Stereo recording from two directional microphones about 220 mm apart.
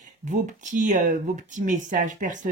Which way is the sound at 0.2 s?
35° right (ahead or behind).